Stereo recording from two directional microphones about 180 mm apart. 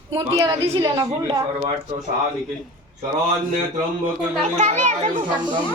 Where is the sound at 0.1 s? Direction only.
25° right (ahead or behind).